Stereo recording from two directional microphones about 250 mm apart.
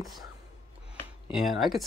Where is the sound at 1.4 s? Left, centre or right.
Centre.